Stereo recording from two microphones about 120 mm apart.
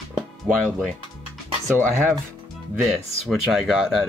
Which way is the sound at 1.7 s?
20° right (ahead or behind).